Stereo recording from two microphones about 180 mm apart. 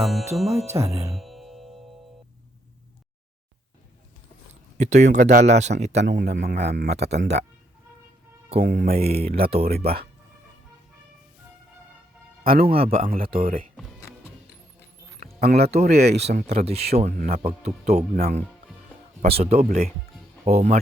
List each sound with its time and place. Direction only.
0.4 s speech: 35° right (ahead or behind)
1.2 s music: centre (ahead or behind)
4.8 s speech: 40° right (ahead or behind)
6.1 s speech: 70° right (ahead or behind)
8.5 s speech: 65° right (ahead or behind)
12.5 s speech: 60° right (ahead or behind)
12.7 s speech: 30° right (ahead or behind)
13.0 s speech: 50° right (ahead or behind)
15.4 s speech: 60° right (ahead or behind)
16.5 s speech: 35° right (ahead or behind)
17.1 s speech: 55° right (ahead or behind)
19.3 s speech: 35° right (ahead or behind)